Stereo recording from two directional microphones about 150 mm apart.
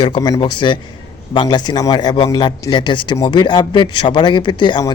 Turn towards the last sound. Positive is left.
turn(degrees=30)  # may be behind; listen again after turning